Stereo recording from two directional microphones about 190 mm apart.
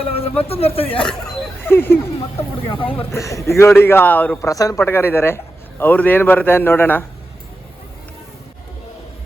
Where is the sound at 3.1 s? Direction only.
15° left (ahead or behind).